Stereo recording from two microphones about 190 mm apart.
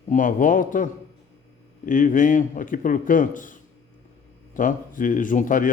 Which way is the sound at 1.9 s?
45° left (ahead or behind).